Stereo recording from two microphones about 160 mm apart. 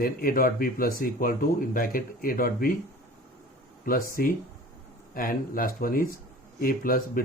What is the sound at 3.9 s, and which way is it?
Speech, 65° left (ahead or behind).